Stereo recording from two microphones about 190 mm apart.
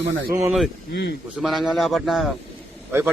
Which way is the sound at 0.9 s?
65° left (ahead or behind).